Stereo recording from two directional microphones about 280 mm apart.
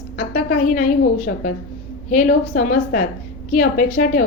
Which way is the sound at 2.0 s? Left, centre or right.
Left.